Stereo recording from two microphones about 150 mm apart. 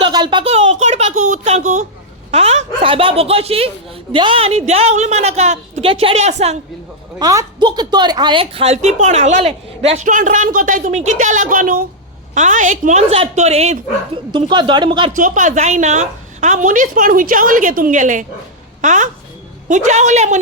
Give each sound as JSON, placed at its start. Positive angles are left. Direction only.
{"t": 0.0, "sound": "a sound", "side_deg": -30}
{"t": 2.3, "sound": "a woman's voice", "side_deg": -45}
{"t": 7.2, "sound": "a woman's voice", "side_deg": -25}
{"t": 14.3, "sound": "speech", "side_deg": -30}
{"t": 15.1, "sound": "a woman's voice", "side_deg": -60}